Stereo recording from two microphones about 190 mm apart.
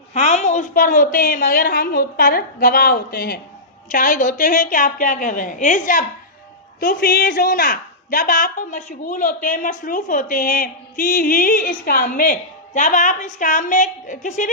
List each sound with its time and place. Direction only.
0.1 s a man's voice: 40° left (ahead or behind)